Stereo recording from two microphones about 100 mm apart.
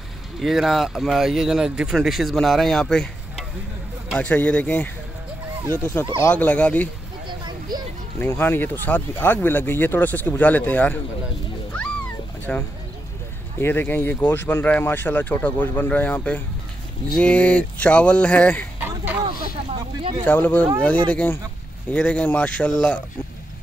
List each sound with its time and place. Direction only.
0.4 s speech: centre (ahead or behind); by 4.8 s 15° left (ahead or behind)
5.6 s speech: 30° right (ahead or behind)
6.3 s speech: 10° left (ahead or behind)
7.2 s a sound: 45° right (ahead or behind)
8.2 s speech: 20° left (ahead or behind)
12.5 s speech: 20° left (ahead or behind)
18.8 s a sound: 15° right (ahead or behind)
19.2 s a sound: 60° right (ahead or behind)
20.2 s speech: 15° left (ahead or behind)